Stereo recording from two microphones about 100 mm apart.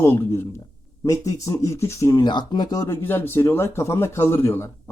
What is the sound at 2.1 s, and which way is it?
Speech, 50° left (ahead or behind).